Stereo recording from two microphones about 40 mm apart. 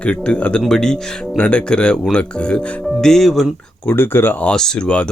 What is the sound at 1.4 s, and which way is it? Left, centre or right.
Speech, left.